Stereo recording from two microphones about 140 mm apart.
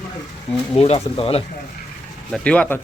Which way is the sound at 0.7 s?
45° left (ahead or behind).